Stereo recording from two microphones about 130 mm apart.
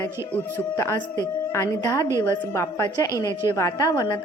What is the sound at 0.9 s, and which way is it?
Speech, 35° left (ahead or behind).